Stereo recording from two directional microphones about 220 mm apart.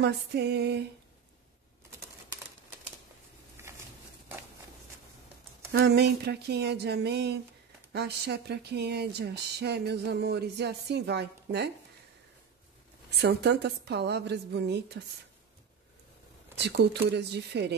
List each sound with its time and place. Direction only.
0.0 s speech: 50° right (ahead or behind)
5.7 s speech: 50° right (ahead or behind)
13.2 s speech: 50° right (ahead or behind)
16.5 s speech: 50° right (ahead or behind)